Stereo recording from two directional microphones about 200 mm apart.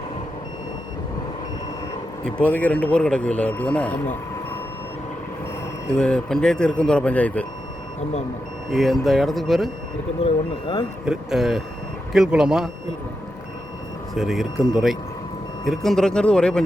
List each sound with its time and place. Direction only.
2.2 s speech: 5° left (ahead or behind)
6.0 s speech: 5° left (ahead or behind)
8.7 s speech: centre (ahead or behind)
10.2 s speech: 25° left (ahead or behind)
11.0 s speech: 5° right (ahead or behind)
14.2 s speech: centre (ahead or behind)